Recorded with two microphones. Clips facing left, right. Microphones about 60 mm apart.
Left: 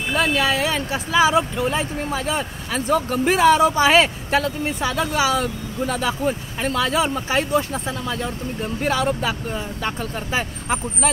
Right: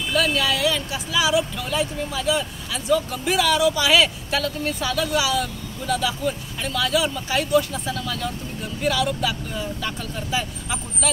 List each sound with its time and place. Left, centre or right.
0.1 s speech: left